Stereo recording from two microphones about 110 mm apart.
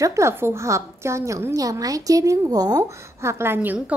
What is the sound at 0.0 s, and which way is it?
A woman's voice, 25° right (ahead or behind).